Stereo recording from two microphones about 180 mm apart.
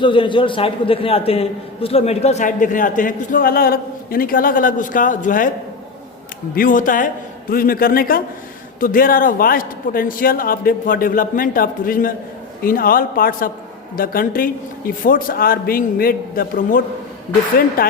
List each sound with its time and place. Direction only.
0.0 s a man's voice: 30° left (ahead or behind); by 5.5 s 45° left (ahead or behind)
6.6 s a man's voice: 50° left (ahead or behind)